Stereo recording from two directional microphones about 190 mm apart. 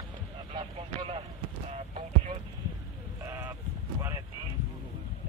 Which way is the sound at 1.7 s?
35° right (ahead or behind).